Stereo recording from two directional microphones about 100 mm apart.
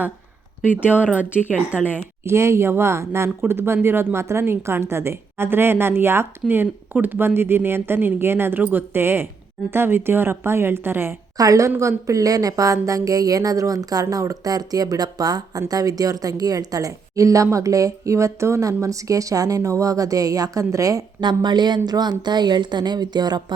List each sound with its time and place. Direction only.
0.8 s speech: 20° left (ahead or behind)
2.2 s a woman's voice: 25° right (ahead or behind)
11.3 s speech: 35° right (ahead or behind)
21.2 s speech: 45° right (ahead or behind)